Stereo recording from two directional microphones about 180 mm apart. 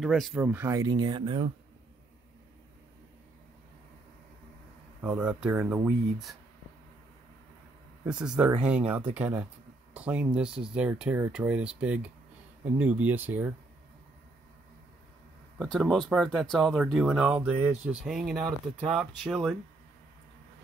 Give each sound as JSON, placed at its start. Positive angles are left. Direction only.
{"t": 0.0, "sound": "speech", "side_deg": 0}
{"t": 5.0, "sound": "speech", "side_deg": -5}
{"t": 8.0, "sound": "speech", "side_deg": -5}
{"t": 15.6, "sound": "speech", "side_deg": 0}